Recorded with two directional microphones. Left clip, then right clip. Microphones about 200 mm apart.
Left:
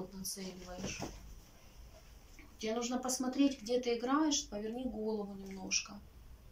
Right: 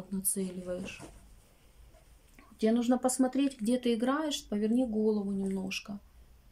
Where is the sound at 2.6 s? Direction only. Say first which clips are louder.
Right 9 dB; 45° right (ahead or behind).